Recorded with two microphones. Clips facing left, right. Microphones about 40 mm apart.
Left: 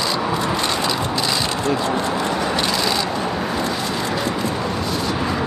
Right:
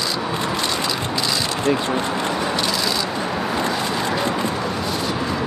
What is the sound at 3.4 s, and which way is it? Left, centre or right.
Vehicle, centre.